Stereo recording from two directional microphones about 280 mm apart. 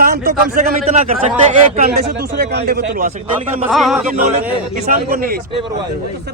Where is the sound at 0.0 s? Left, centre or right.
Right.